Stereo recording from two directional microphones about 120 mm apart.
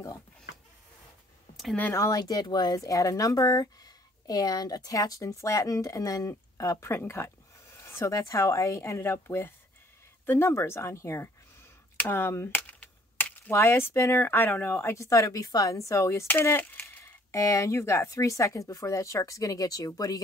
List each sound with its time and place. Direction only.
1.8 s speech: 20° left (ahead or behind)